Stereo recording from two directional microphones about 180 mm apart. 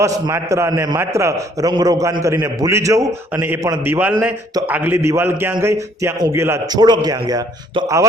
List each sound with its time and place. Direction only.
0.0 s a man's voice: 15° right (ahead or behind)